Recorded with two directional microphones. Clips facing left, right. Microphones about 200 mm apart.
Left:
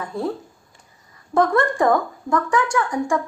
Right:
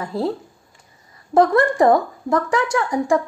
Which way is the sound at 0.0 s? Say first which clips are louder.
Right 3 dB; 30° right (ahead or behind).